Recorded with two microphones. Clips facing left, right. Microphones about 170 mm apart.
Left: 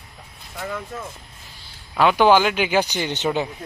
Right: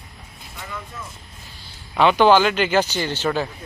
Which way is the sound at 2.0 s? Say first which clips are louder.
Right 1 dB; 10° left (ahead or behind).